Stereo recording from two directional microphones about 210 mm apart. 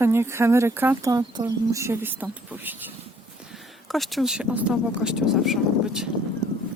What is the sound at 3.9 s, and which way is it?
Speech, centre (ahead or behind).